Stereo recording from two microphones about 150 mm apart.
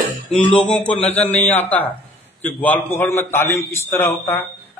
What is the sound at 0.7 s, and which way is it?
A man's voice, 10° left (ahead or behind).